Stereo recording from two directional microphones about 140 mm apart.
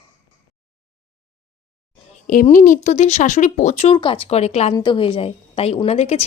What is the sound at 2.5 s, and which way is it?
A woman's voice, 70° left (ahead or behind).